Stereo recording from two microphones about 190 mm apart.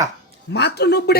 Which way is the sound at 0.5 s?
60° left (ahead or behind).